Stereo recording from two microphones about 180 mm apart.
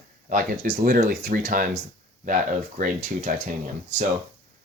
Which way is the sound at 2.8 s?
45° right (ahead or behind).